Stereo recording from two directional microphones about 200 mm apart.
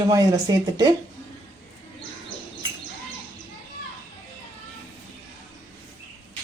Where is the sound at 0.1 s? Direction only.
20° right (ahead or behind).